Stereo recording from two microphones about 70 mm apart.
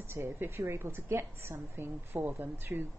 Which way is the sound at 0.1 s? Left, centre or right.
Right.